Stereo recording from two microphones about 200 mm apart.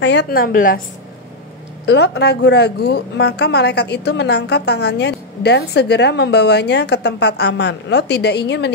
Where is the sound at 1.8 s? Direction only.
55° left (ahead or behind).